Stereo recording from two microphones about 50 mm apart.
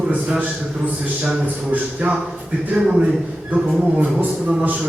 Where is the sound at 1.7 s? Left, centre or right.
Right.